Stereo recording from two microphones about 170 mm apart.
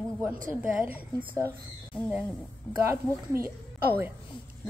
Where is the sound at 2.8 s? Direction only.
15° right (ahead or behind).